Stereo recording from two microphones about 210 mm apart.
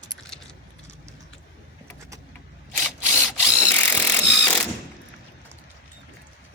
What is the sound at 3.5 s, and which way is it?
Mechanisms, 10° left (ahead or behind).